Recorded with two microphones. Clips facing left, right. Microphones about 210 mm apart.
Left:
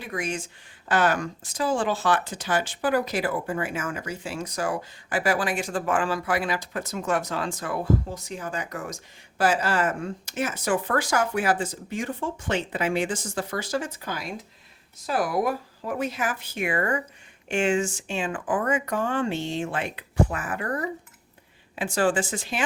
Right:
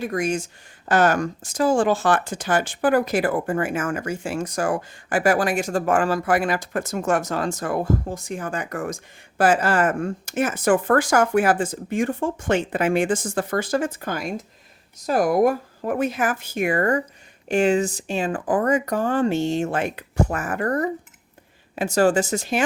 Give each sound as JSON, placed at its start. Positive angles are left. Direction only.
{"t": 0.0, "sound": "speech", "side_deg": -45}